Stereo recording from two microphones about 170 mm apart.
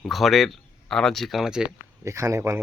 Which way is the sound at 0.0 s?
Centre (ahead or behind).